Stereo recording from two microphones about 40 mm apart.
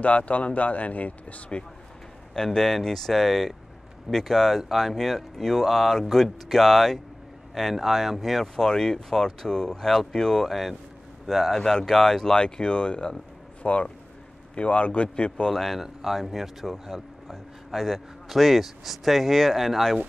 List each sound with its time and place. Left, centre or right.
0.0 s speech: left
2.3 s a man's voice: centre
8.5 s speech: centre
10.5 s a man's voice: centre
11.5 s speech: centre
15.5 s a man's voice: centre
17.3 s a man's voice: centre